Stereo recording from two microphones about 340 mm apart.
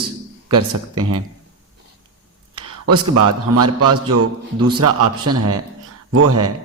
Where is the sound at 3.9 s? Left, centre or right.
Right.